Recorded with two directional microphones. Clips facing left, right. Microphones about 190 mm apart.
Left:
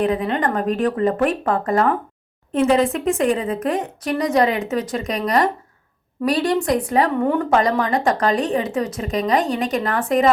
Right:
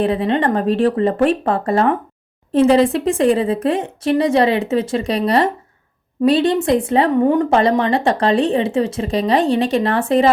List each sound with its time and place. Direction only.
0.0 s a woman's voice: 30° right (ahead or behind)